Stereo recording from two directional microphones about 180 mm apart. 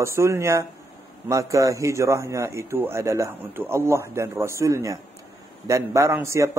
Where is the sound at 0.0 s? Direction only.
15° right (ahead or behind).